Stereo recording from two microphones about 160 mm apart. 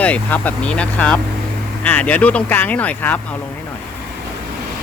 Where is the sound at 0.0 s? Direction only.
10° left (ahead or behind).